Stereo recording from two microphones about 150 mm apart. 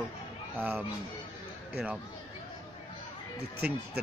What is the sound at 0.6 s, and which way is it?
Speech, 10° right (ahead or behind).